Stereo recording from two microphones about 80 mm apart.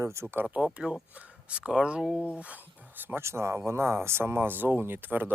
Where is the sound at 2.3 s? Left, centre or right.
Centre.